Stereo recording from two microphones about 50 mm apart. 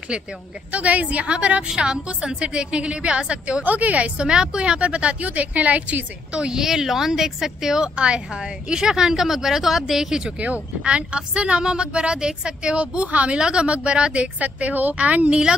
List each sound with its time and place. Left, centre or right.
0.1 s speech: centre
0.7 s speech: right
3.6 s speech: right
6.4 s speech: centre
10.4 s speech: right